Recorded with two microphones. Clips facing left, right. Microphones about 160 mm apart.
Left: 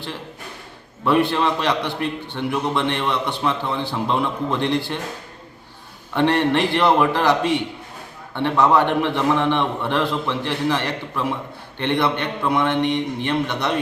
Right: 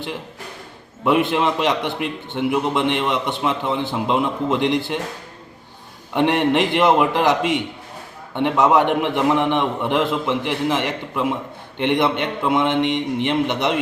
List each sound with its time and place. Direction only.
1.0 s a man's voice: 15° right (ahead or behind)
6.1 s a man's voice: 15° right (ahead or behind)